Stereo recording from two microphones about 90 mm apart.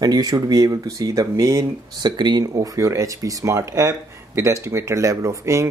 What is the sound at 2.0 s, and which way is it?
Speech, 55° right (ahead or behind).